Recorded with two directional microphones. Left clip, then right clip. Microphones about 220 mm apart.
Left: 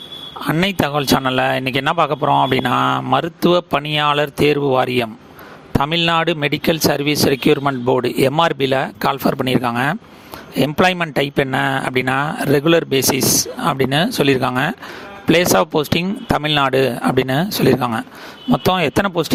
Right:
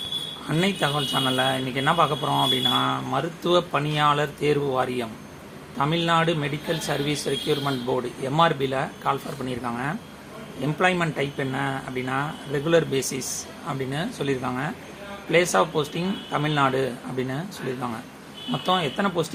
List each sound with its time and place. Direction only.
0.4 s speech: 45° left (ahead or behind)